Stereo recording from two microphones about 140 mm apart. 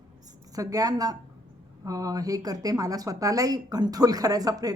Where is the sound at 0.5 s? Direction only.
25° right (ahead or behind).